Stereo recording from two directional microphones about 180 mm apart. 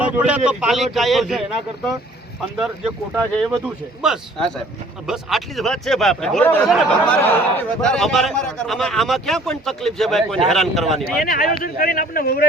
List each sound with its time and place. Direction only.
0.0 s a man's voice: 5° right (ahead or behind)
11.3 s speech: 55° left (ahead or behind)